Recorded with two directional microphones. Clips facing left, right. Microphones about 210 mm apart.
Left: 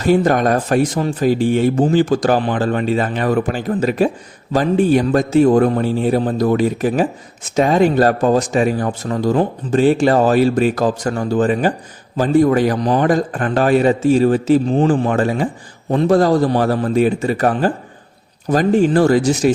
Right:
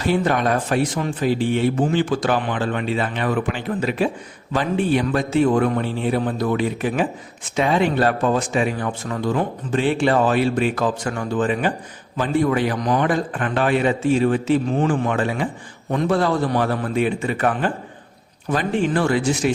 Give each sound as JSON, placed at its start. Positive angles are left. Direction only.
{"t": 0.0, "sound": "a man's voice", "side_deg": 45}